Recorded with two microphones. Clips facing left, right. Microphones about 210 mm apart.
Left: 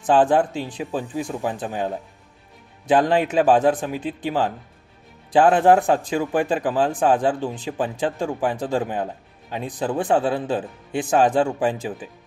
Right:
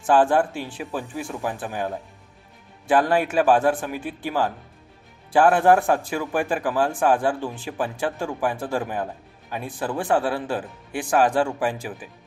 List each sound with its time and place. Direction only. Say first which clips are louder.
0.0 s speech: left 1 dB; 20° left (ahead or behind)